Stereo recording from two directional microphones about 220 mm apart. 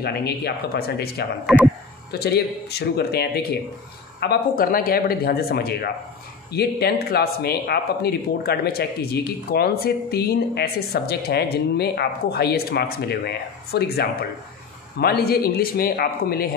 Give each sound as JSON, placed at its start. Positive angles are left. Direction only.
{"t": 0.0, "sound": "speech", "side_deg": 45}
{"t": 1.4, "sound": "speech", "side_deg": 0}
{"t": 2.1, "sound": "speech", "side_deg": 45}